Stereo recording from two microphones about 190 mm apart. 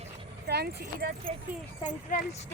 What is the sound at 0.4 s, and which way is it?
Speech, 60° right (ahead or behind).